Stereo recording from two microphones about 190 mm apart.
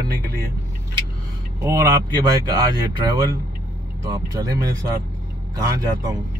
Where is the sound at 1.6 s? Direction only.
20° right (ahead or behind).